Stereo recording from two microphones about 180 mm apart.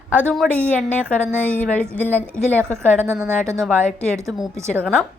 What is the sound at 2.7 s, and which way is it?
Speech, 15° right (ahead or behind).